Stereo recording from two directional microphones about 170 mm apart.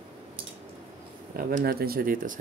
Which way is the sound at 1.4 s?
60° right (ahead or behind).